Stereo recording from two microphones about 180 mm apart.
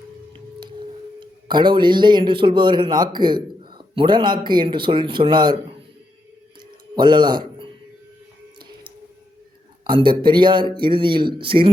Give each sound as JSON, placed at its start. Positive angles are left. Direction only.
{"t": 1.2, "sound": "speech", "side_deg": -25}
{"t": 6.9, "sound": "a man's voice", "side_deg": -25}
{"t": 9.8, "sound": "speech", "side_deg": -25}